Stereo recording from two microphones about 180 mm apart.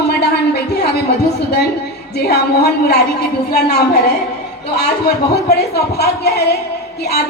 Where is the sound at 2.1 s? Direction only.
65° left (ahead or behind).